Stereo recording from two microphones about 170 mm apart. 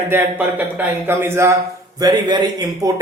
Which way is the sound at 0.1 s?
10° right (ahead or behind).